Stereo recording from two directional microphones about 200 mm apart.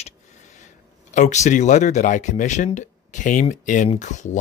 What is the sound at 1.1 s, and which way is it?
Speech, 35° left (ahead or behind).